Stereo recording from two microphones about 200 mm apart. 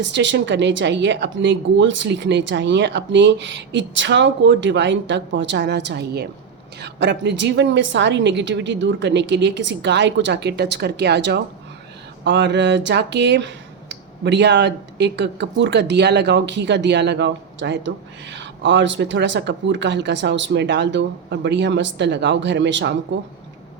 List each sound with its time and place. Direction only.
0.0 s speech: 60° right (ahead or behind)